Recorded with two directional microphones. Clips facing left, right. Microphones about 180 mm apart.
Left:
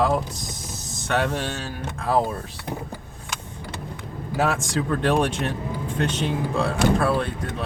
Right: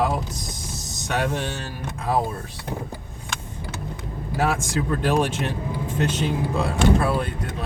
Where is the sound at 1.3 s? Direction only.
Centre (ahead or behind).